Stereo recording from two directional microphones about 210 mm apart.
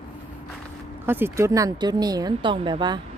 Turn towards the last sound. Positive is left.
turn(degrees=-20)  # may be behind; listen again after turning